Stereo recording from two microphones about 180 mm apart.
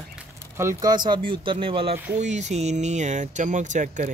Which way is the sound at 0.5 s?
15° right (ahead or behind).